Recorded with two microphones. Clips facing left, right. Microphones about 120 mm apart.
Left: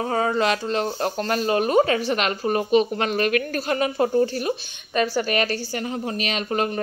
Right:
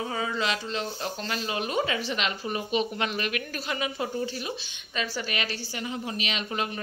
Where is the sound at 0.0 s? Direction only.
50° left (ahead or behind).